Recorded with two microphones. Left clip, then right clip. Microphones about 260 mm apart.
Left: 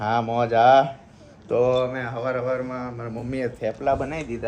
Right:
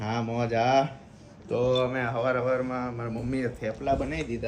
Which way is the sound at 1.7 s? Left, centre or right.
Centre.